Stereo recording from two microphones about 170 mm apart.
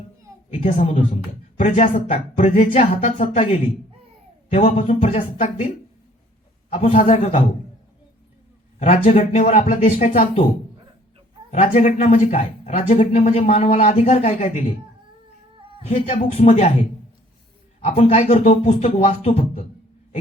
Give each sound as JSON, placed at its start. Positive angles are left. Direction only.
{"t": 0.5, "sound": "speech", "side_deg": 35}
{"t": 8.8, "sound": "speech", "side_deg": 40}
{"t": 11.5, "sound": "speech", "side_deg": 45}
{"t": 15.8, "sound": "speech", "side_deg": 35}
{"t": 17.8, "sound": "speech", "side_deg": 35}